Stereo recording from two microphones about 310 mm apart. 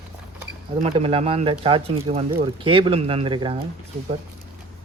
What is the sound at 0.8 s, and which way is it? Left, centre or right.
Speech, centre.